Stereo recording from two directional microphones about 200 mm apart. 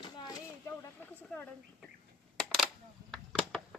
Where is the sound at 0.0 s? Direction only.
20° left (ahead or behind).